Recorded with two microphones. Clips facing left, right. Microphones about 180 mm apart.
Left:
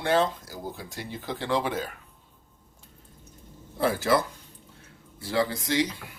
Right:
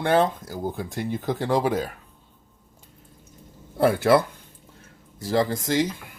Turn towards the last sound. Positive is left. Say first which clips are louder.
# right 3 dB
turn(degrees=-45)  # may be behind; listen again after turning